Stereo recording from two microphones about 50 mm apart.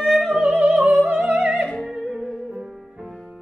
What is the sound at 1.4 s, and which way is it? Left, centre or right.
Opera, right.